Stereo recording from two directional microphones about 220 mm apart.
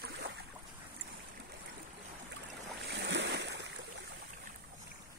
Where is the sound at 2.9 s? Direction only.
55° right (ahead or behind).